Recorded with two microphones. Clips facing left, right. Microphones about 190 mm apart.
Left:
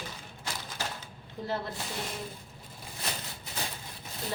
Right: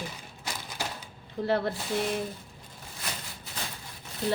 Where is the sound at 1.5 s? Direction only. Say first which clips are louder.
Right 7 dB; 65° right (ahead or behind).